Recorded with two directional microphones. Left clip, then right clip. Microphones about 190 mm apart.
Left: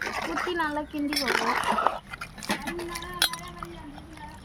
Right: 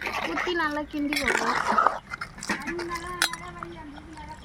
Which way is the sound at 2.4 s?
60° left (ahead or behind).